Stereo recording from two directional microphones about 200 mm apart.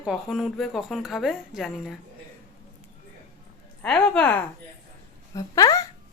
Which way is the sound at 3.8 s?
5° left (ahead or behind).